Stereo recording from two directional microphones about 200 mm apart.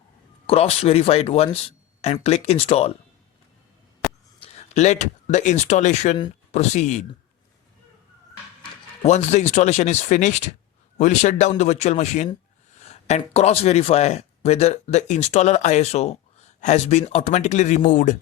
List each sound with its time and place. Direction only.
0.4 s speech: 30° left (ahead or behind)
4.4 s speech: 30° left (ahead or behind)
9.0 s speech: 35° left (ahead or behind)